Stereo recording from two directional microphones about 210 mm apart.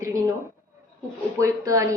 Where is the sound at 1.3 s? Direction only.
15° right (ahead or behind).